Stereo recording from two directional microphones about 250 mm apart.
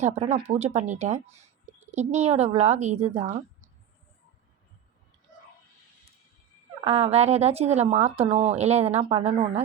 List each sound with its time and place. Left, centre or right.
0.0 s speech: right
6.8 s speech: right